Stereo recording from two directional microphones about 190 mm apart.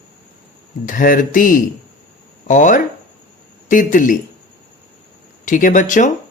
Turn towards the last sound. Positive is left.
turn(degrees=40)  # may be behind; listen again after turning